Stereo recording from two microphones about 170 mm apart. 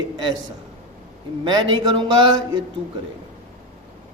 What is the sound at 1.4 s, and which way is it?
A man's voice, 25° right (ahead or behind).